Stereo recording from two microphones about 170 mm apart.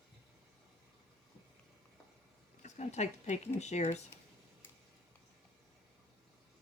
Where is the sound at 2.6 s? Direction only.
45° left (ahead or behind).